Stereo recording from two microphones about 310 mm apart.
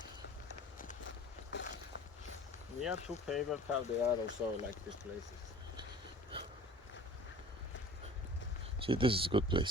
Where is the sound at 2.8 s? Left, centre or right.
Centre.